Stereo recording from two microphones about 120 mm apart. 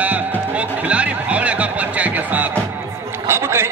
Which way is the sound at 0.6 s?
10° right (ahead or behind).